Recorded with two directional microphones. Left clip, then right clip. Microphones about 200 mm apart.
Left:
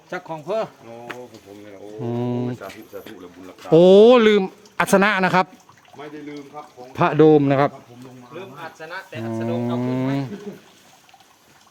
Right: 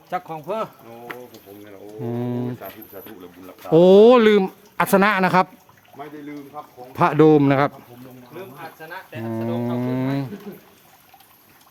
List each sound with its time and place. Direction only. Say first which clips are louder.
0.1 s speech: even; 5° right (ahead or behind)
2.0 s speech: left 2 dB; 5° left (ahead or behind)
6.5 s speech: even; 5° left (ahead or behind)
8.8 s speech: left 3 dB; 30° left (ahead or behind)
9.2 s speech: even; centre (ahead or behind)